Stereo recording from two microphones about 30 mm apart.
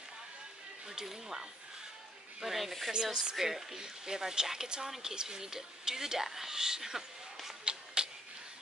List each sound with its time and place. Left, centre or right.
0.8 s speech: centre
2.4 s speech: centre
2.9 s speech: right
7.6 s a sound: right